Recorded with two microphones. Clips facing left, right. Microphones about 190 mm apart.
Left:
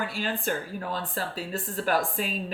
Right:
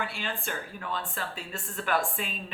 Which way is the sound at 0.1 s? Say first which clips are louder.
Left 6 dB; 40° left (ahead or behind).